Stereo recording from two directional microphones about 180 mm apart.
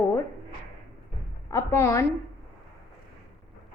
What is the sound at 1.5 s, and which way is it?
Speech, 15° left (ahead or behind).